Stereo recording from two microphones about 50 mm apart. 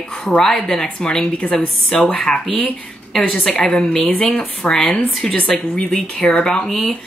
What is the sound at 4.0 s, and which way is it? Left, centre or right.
Speech, left.